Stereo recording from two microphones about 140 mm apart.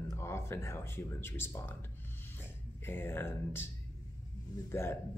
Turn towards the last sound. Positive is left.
turn(degrees=15)  # may be behind; listen again after turning